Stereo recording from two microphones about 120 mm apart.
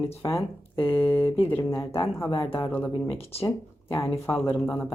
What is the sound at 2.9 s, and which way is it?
Speech, 50° left (ahead or behind).